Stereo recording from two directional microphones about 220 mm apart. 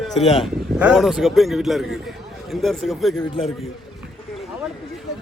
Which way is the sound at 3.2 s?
25° left (ahead or behind).